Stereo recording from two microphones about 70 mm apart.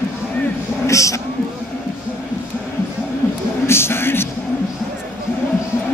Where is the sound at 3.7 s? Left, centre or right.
Left.